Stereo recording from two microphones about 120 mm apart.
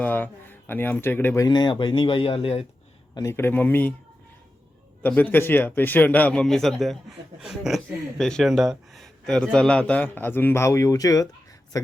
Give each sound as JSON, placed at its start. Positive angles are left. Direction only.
{"t": 0.0, "sound": "a man's voice", "side_deg": 15}
{"t": 1.4, "sound": "speech", "side_deg": 35}
{"t": 3.2, "sound": "a man's voice", "side_deg": 25}
{"t": 5.0, "sound": "a man's voice", "side_deg": 15}